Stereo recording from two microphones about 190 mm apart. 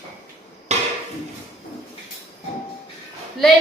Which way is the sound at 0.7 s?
35° right (ahead or behind).